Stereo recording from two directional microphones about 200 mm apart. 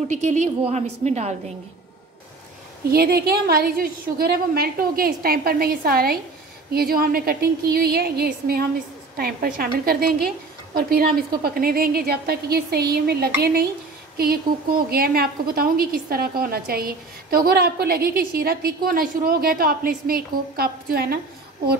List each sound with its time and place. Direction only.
0.1 s a woman's voice: 35° right (ahead or behind)
2.9 s a woman's voice: 50° right (ahead or behind)